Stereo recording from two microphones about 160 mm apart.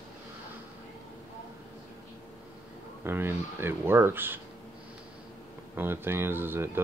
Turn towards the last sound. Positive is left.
turn(degrees=-15)  # may be behind; listen again after turning